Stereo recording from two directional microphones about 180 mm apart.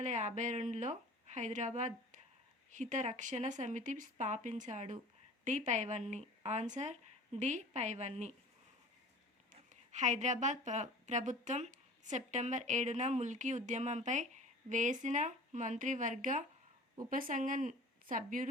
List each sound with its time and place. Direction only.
0.0 s a woman's voice: 40° right (ahead or behind)
9.5 s speech: 40° right (ahead or behind)